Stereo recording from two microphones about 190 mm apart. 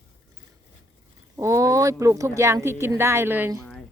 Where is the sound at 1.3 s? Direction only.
15° right (ahead or behind).